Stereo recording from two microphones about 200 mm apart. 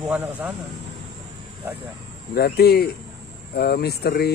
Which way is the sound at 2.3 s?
50° left (ahead or behind).